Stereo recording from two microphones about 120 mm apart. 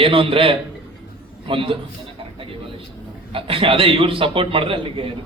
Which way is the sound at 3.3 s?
50° right (ahead or behind).